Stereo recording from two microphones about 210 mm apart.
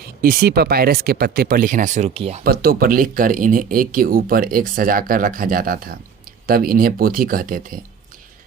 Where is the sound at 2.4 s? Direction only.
45° right (ahead or behind).